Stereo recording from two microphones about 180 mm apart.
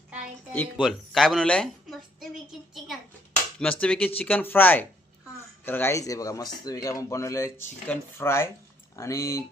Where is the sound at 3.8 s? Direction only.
5° left (ahead or behind).